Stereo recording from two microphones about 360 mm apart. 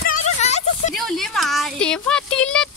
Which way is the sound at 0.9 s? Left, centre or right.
Centre.